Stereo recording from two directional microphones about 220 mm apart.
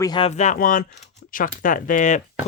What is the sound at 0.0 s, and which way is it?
Speech, 20° left (ahead or behind).